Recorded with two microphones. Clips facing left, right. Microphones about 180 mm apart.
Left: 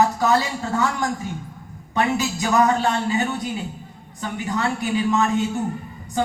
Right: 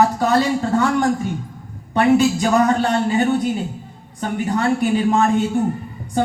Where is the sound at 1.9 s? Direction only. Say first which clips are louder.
Right 8 dB; 55° right (ahead or behind).